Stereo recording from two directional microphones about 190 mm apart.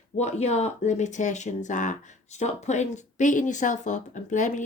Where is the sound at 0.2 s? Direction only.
35° left (ahead or behind).